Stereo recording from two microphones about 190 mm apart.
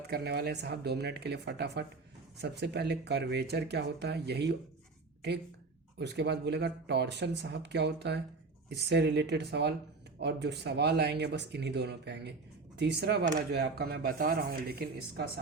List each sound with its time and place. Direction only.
0.1 s speech: 60° right (ahead or behind)
6.0 s speech: 65° right (ahead or behind)